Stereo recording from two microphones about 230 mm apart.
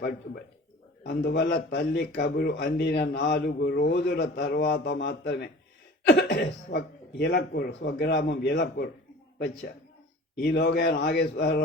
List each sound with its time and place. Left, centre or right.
1.0 s speech: left
10.4 s speech: left